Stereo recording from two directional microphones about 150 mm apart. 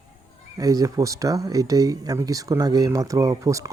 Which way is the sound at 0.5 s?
25° right (ahead or behind).